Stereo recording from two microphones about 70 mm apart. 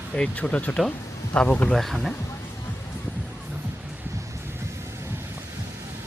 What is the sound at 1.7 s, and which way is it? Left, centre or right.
Speech, centre.